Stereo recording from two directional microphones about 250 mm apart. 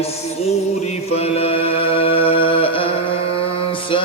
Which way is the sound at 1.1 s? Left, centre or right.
Left.